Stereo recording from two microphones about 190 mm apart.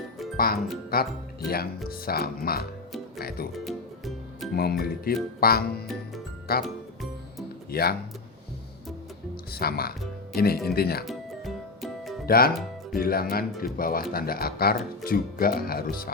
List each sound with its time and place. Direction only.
0.3 s speech: 50° left (ahead or behind)
3.6 s music: centre (ahead or behind)
4.5 s speech: 55° left (ahead or behind)
7.7 s speech: 55° left (ahead or behind)
9.3 s speech: 55° left (ahead or behind)
11.0 s music: centre (ahead or behind)
12.2 s speech: 50° left (ahead or behind)